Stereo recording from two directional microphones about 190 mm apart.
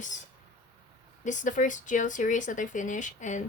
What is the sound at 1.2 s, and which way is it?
Speech, 40° left (ahead or behind).